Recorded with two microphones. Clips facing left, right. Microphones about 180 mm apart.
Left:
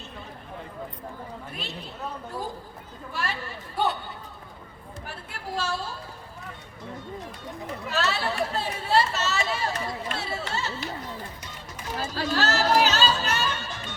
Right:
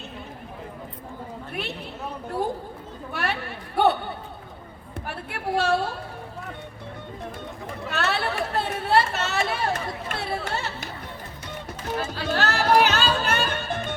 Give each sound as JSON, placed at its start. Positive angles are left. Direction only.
{"t": 1.5, "sound": "a woman's voice", "side_deg": -60}
{"t": 3.1, "sound": "a woman's voice", "side_deg": -65}
{"t": 7.9, "sound": "chatter", "side_deg": -60}
{"t": 12.1, "sound": "music", "side_deg": -55}